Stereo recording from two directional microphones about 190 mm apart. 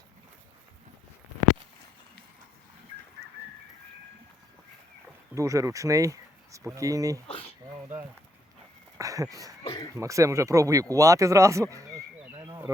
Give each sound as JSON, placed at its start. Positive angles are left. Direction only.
{"t": 5.3, "sound": "speech", "side_deg": -15}
{"t": 7.3, "sound": "speech", "side_deg": 30}
{"t": 9.0, "sound": "speech", "side_deg": -15}
{"t": 9.6, "sound": "speech", "side_deg": 15}
{"t": 9.9, "sound": "speech", "side_deg": -15}
{"t": 12.3, "sound": "a sound", "side_deg": -25}